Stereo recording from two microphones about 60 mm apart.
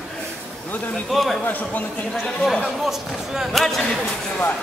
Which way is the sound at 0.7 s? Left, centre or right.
Left.